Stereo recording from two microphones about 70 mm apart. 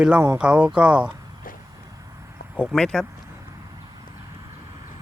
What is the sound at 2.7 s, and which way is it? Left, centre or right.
Speech, centre.